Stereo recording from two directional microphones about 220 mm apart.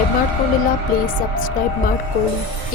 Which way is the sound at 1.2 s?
40° left (ahead or behind).